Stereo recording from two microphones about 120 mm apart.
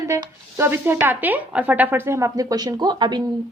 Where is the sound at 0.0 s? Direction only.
25° right (ahead or behind).